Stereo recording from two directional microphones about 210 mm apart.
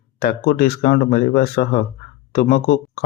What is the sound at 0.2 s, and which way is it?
Speech, 45° left (ahead or behind).